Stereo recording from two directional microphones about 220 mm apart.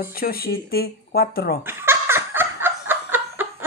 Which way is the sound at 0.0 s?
40° left (ahead or behind).